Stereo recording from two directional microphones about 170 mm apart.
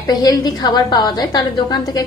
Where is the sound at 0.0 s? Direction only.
20° left (ahead or behind).